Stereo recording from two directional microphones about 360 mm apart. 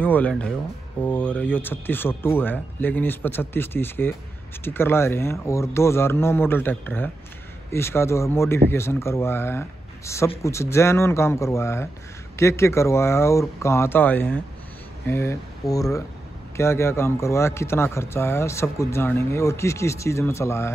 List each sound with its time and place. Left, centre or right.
0.0 s speech: centre